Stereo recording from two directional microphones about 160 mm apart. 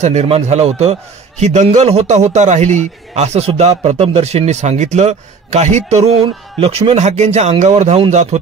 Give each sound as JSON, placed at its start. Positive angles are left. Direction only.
{"t": 0.0, "sound": "a man's voice", "side_deg": -45}